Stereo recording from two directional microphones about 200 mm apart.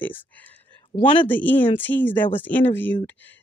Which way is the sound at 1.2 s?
10° left (ahead or behind).